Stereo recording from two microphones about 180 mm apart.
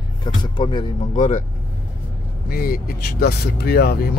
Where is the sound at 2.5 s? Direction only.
55° left (ahead or behind).